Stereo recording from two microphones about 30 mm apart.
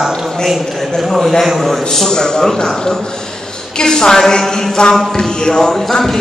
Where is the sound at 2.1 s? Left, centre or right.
Left.